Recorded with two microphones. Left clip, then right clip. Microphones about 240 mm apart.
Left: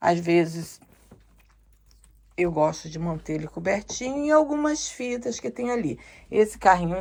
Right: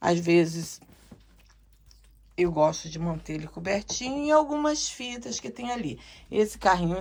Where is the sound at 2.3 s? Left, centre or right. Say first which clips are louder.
Even; centre.